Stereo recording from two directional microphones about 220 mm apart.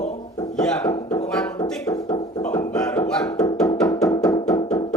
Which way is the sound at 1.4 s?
5° left (ahead or behind).